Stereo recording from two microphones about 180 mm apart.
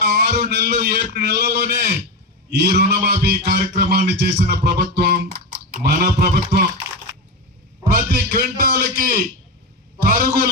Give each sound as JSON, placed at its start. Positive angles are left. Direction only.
{"t": 0.0, "sound": "a sound", "side_deg": -65}
{"t": 0.4, "sound": "music", "side_deg": -65}
{"t": 8.1, "sound": "music", "side_deg": -55}
{"t": 10.0, "sound": "a man's voice", "side_deg": -55}